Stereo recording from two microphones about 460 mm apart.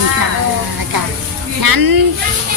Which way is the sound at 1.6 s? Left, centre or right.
Right.